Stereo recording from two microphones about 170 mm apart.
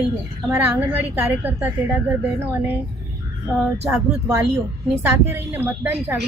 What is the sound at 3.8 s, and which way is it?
A woman's voice, 15° right (ahead or behind).